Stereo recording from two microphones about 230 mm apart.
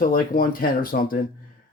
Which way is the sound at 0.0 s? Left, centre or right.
Left.